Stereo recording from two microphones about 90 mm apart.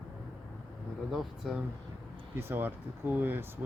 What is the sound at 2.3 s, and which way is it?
Speech, 25° right (ahead or behind).